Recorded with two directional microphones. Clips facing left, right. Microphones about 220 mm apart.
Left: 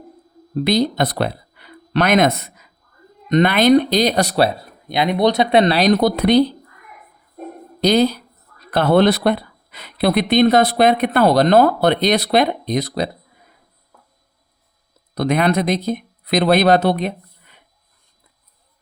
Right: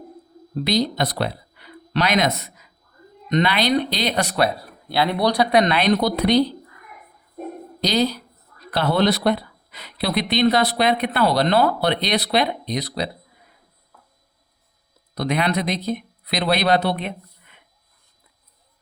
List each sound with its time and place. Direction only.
0.6 s speech: 50° left (ahead or behind); by 4.5 s 35° left (ahead or behind)
4.9 s speech: 20° left (ahead or behind); by 6.4 s 50° left (ahead or behind)
7.8 s speech: 50° left (ahead or behind)
15.1 s speech: 50° left (ahead or behind)